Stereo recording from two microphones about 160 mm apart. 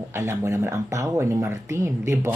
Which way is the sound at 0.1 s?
15° right (ahead or behind).